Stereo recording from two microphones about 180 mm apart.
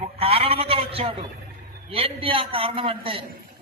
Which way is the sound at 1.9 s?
30° right (ahead or behind).